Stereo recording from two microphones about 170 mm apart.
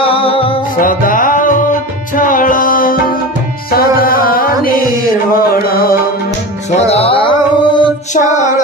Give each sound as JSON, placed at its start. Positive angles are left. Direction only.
{"t": 0.0, "sound": "music", "side_deg": 35}
{"t": 0.7, "sound": "music", "side_deg": 55}
{"t": 6.7, "sound": "music", "side_deg": 35}